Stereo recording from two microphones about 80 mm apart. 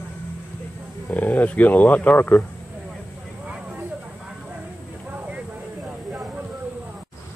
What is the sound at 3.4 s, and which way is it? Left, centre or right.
Vehicle, centre.